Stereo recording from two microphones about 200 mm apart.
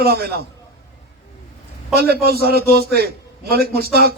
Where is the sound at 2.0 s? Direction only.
50° right (ahead or behind).